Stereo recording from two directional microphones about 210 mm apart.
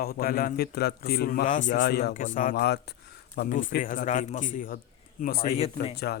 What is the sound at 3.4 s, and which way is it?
A man's voice, 40° left (ahead or behind).